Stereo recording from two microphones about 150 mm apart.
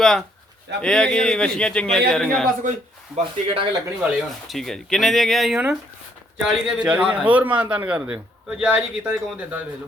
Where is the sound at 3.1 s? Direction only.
40° right (ahead or behind).